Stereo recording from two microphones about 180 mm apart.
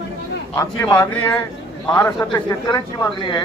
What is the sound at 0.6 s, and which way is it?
A man's voice, 10° left (ahead or behind).